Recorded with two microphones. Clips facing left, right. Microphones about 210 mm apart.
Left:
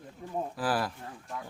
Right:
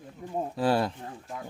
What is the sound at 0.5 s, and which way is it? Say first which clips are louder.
Speech: right 7 dB; 25° right (ahead or behind).